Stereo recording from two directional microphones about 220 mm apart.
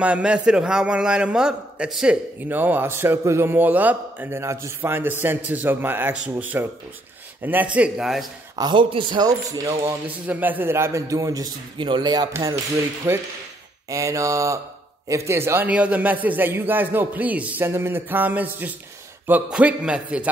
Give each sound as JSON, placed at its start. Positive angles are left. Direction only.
{"t": 0.0, "sound": "a man's voice", "side_deg": -5}
{"t": 7.7, "sound": "a man's voice", "side_deg": -5}
{"t": 8.5, "sound": "a man's voice", "side_deg": -20}